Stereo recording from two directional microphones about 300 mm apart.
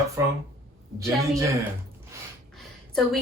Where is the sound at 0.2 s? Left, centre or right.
Centre.